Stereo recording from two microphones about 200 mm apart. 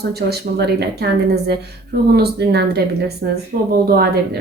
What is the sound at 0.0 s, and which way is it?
A woman's voice, 55° right (ahead or behind).